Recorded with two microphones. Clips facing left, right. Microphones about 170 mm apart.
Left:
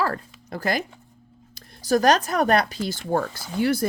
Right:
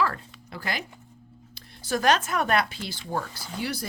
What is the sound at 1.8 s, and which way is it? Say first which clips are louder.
Speech: left 5 dB; 40° left (ahead or behind).